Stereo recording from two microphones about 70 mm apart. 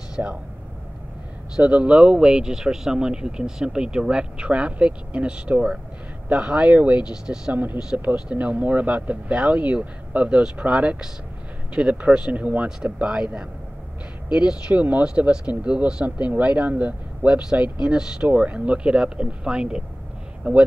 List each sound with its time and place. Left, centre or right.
0.2 s speech: right
1.6 s speech: centre